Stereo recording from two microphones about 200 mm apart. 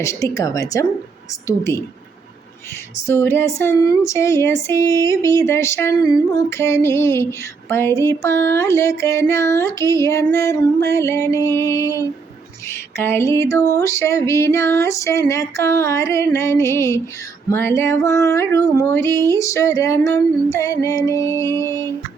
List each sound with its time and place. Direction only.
0.0 s female singing: 15° left (ahead or behind)
3.1 s female singing: 10° left (ahead or behind)